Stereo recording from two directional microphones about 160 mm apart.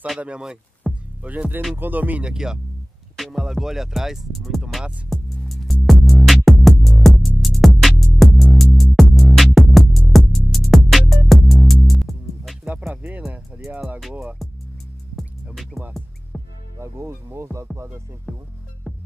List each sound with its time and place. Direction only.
0.0 s speech: 5° right (ahead or behind)
3.2 s music: centre (ahead or behind)
12.7 s speech: 10° right (ahead or behind)
13.7 s music: centre (ahead or behind)
16.8 s speech: 20° right (ahead or behind)
18.3 s music: 5° right (ahead or behind)